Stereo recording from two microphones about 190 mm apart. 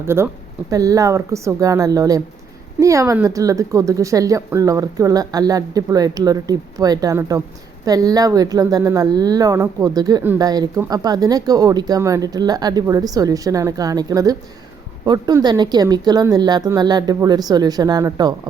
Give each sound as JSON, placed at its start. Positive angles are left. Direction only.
{"t": 0.0, "sound": "a woman's voice", "side_deg": -15}